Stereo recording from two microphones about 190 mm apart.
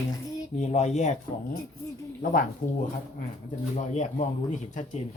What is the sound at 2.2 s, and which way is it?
Speech, 45° left (ahead or behind).